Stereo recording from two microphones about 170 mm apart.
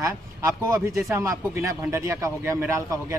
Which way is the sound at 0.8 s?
Centre (ahead or behind).